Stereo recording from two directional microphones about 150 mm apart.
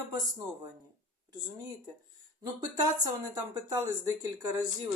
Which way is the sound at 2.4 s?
25° right (ahead or behind).